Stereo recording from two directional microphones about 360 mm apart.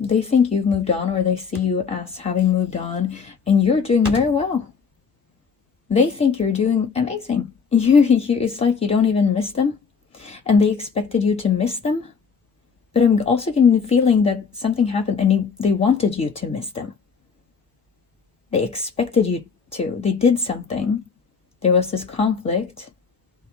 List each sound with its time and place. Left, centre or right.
0.0 s speech: centre
2.1 s speech: centre
5.9 s speech: centre
18.5 s speech: centre